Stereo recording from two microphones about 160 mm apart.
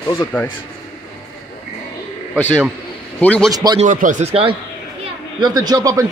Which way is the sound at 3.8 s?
50° right (ahead or behind).